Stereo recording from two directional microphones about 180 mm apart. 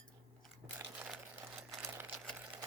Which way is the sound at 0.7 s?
10° right (ahead or behind).